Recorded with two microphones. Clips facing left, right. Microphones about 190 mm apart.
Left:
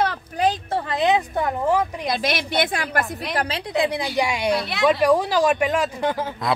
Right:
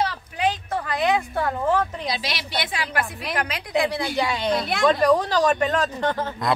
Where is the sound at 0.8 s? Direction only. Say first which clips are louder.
Left 2 dB; 20° left (ahead or behind).